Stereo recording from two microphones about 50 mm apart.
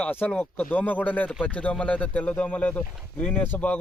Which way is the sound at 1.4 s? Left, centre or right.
Left.